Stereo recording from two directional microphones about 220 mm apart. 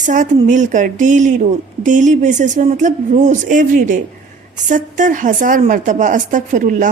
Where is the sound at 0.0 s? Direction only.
35° right (ahead or behind).